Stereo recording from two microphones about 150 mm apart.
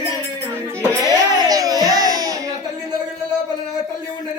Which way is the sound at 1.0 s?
25° right (ahead or behind).